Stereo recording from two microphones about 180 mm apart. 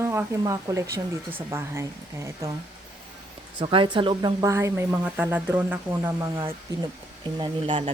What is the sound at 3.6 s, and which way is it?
Speech, 30° right (ahead or behind).